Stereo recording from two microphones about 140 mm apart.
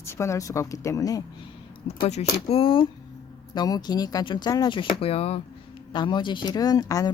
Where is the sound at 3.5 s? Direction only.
30° left (ahead or behind); by 5.4 s 45° left (ahead or behind).